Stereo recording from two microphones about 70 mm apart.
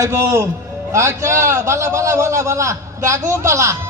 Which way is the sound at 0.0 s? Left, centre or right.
Right.